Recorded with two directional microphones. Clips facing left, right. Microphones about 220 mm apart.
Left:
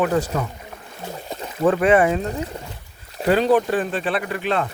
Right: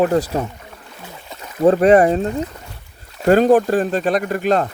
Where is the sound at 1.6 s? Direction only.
40° right (ahead or behind).